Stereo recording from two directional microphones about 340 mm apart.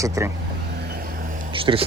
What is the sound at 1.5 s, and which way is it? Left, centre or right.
Speech, centre.